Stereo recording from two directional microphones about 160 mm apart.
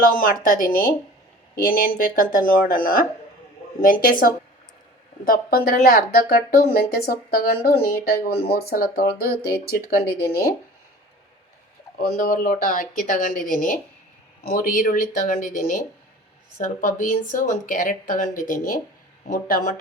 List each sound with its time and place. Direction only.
0.0 s speech: 60° left (ahead or behind)
11.9 s speech: 65° left (ahead or behind)